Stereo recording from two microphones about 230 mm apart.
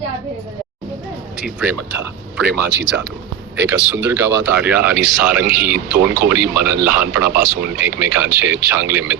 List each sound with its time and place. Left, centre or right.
1.4 s speech: centre
2.5 s speech: right
3.7 s speech: centre